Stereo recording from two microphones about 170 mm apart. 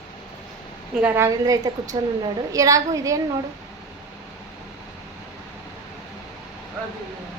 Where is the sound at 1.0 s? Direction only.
10° right (ahead or behind).